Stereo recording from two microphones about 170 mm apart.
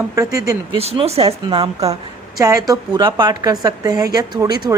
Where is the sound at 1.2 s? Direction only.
25° right (ahead or behind).